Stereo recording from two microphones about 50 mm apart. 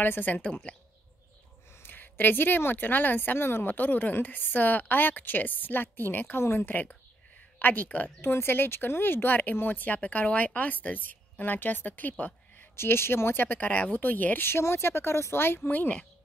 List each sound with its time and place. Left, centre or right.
0.0 s speech: left
0.7 s speech: left
1.8 s speech: left
6.7 s speech: left
8.2 s speech: left
9.9 s speech: left
12.7 s speech: left
14.5 s speech: left